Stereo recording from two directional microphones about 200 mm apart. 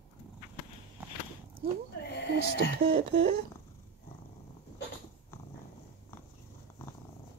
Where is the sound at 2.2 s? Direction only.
60° left (ahead or behind).